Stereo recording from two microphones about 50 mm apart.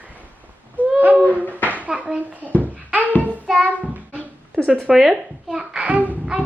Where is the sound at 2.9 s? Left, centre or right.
Right.